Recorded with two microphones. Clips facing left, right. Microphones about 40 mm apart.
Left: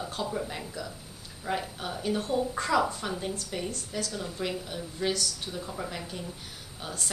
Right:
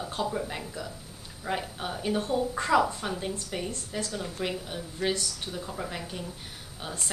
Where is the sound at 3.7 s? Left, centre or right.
Right.